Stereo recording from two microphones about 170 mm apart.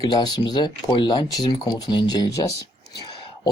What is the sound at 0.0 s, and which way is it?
Speech, 25° left (ahead or behind).